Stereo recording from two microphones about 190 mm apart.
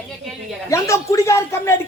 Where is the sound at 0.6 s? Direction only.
15° left (ahead or behind).